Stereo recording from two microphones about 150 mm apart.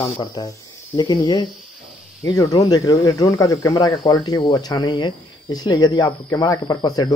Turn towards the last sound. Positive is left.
turn(degrees=25)  # may be behind; listen again after turning